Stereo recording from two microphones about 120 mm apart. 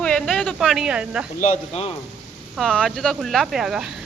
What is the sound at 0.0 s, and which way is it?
Speech, 5° left (ahead or behind).